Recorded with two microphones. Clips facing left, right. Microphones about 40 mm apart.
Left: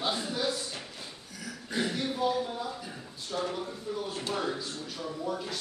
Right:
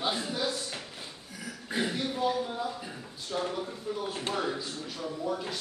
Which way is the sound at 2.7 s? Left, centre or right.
Centre.